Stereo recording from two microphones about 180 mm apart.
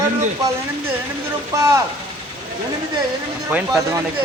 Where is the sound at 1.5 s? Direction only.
15° right (ahead or behind).